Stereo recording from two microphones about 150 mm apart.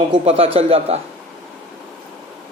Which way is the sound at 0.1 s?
40° right (ahead or behind).